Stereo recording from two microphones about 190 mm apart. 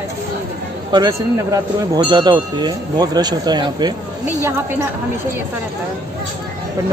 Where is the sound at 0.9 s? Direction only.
20° right (ahead or behind).